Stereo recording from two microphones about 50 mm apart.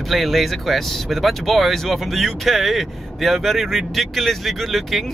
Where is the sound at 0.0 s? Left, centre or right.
Centre.